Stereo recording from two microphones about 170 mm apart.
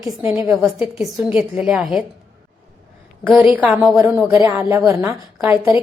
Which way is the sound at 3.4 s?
5° right (ahead or behind).